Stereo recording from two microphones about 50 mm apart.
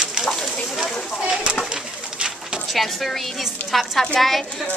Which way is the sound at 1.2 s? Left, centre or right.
Centre.